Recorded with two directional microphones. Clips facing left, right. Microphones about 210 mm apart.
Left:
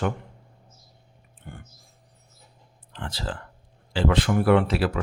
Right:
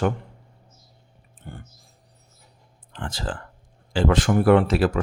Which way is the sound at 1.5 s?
35° right (ahead or behind).